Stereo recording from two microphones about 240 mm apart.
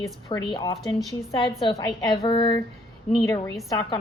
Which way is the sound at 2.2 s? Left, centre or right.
Centre.